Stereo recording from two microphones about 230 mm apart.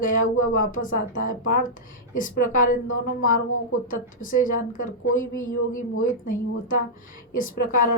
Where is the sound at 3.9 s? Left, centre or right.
Left.